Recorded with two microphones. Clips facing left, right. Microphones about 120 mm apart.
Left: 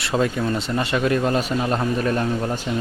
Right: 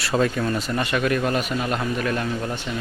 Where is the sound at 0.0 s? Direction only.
20° left (ahead or behind).